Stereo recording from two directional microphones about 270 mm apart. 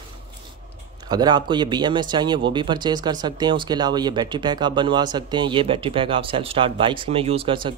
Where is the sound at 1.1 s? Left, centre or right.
Centre.